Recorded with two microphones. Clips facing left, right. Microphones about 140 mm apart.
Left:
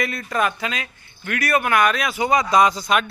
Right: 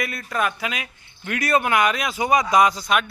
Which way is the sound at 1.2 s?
20° right (ahead or behind).